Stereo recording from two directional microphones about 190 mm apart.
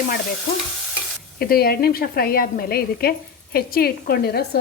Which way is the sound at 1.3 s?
55° left (ahead or behind).